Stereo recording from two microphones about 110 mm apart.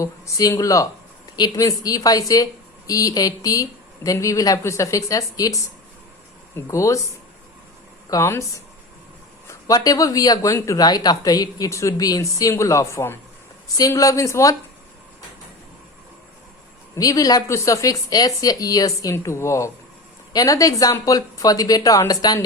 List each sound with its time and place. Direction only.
0.0 s a woman's voice: 30° left (ahead or behind)
6.7 s speech: 30° left (ahead or behind)
8.1 s a woman's voice: 25° left (ahead or behind)
16.9 s a woman's voice: 30° left (ahead or behind)